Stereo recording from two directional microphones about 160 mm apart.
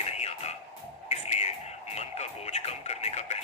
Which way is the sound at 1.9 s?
45° left (ahead or behind).